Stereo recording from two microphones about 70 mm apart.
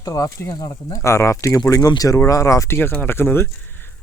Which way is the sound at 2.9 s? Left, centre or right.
Left.